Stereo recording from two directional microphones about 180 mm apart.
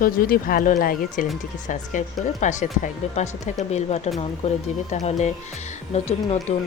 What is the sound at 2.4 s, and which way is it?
A woman's voice, 40° left (ahead or behind).